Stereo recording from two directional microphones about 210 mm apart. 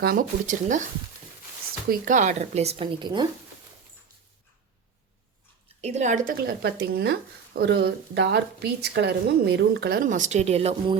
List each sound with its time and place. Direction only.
0.0 s speech: 40° right (ahead or behind)
1.9 s speech: 40° right (ahead or behind); by 3.2 s 20° right (ahead or behind)
5.8 s speech: 35° right (ahead or behind)